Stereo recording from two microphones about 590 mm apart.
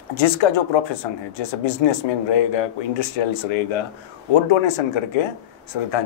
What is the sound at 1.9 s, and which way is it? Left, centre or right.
Speech, left.